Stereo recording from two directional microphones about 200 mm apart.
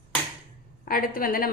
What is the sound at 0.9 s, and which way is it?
Speech, 45° left (ahead or behind).